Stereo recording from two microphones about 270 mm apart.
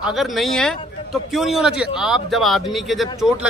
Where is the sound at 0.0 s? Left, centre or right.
Centre.